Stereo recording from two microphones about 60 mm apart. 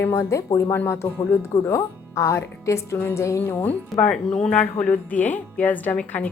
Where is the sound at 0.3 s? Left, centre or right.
Left.